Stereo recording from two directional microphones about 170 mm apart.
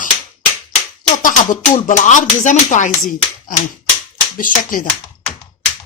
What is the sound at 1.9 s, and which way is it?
Speech, 45° left (ahead or behind).